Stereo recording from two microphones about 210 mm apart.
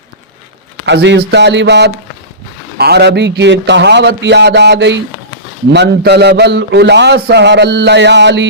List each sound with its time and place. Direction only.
0.9 s a man's voice: 55° right (ahead or behind)